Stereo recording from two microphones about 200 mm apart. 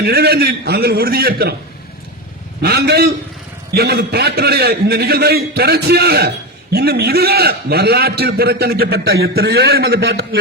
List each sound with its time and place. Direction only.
0.0 s a man's voice: 55° right (ahead or behind)
2.6 s a man's voice: 50° right (ahead or behind)